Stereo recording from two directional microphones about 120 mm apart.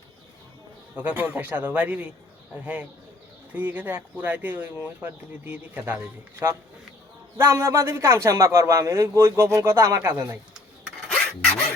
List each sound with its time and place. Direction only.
0.9 s speech: 15° right (ahead or behind)
3.5 s a man's voice: 15° right (ahead or behind)
11.1 s filing: 10° left (ahead or behind)